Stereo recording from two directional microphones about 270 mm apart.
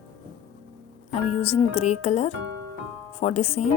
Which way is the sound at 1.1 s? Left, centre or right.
Left.